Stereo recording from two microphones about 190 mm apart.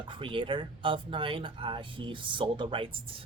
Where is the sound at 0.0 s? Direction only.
25° right (ahead or behind).